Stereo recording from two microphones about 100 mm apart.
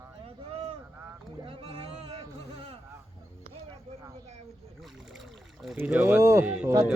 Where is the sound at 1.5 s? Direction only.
65° right (ahead or behind).